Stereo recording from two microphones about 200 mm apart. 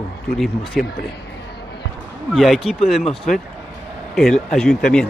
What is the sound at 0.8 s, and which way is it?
Speech, centre (ahead or behind).